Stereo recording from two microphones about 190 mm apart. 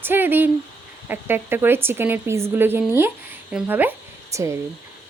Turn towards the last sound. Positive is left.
turn(degrees=-15)  # may be behind; listen again after turning